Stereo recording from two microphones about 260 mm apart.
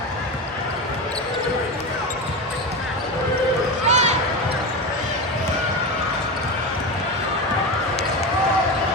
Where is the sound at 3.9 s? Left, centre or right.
Right.